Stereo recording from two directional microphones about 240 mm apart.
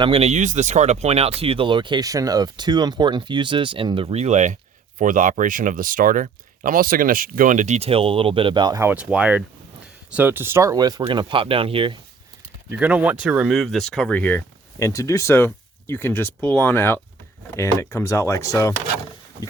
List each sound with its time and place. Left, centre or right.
0.0 s speech: right
12.6 s speech: centre